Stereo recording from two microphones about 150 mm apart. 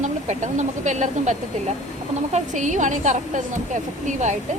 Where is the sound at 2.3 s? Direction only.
55° right (ahead or behind).